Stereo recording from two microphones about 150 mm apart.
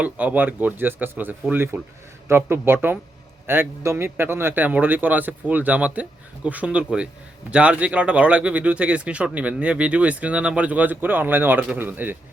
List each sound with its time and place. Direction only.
0.0 s speech: 10° right (ahead or behind)